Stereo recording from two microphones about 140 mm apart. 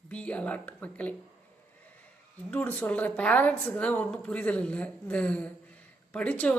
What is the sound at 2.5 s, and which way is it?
Speech, 10° left (ahead or behind).